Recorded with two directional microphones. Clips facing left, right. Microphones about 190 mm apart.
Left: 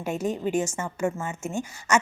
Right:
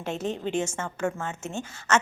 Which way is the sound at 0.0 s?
10° left (ahead or behind).